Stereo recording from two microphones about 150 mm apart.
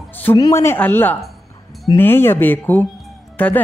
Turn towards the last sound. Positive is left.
turn(degrees=10)  # may be behind; listen again after turning